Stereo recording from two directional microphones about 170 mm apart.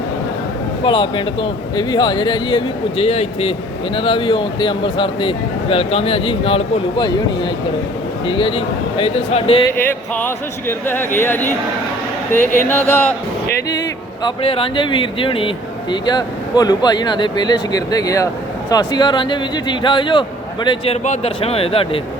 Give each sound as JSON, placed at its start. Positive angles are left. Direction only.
{"t": 0.9, "sound": "speech", "side_deg": 30}
{"t": 9.8, "sound": "speech", "side_deg": 10}
{"t": 12.6, "sound": "speech", "side_deg": 10}
{"t": 14.3, "sound": "speech", "side_deg": 35}